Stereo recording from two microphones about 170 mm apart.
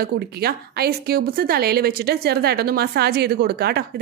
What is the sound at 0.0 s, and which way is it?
Speech, 65° right (ahead or behind).